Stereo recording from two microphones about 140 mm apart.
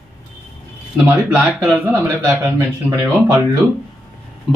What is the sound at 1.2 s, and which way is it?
Speech, 5° right (ahead or behind).